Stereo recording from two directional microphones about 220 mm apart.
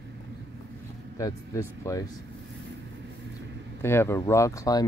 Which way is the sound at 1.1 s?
15° left (ahead or behind).